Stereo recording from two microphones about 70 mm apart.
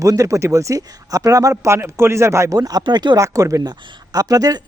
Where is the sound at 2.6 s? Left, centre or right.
Right.